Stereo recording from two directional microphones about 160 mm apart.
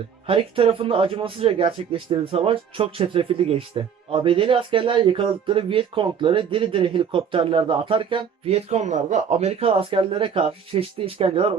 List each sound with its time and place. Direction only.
0.3 s speech: 35° right (ahead or behind)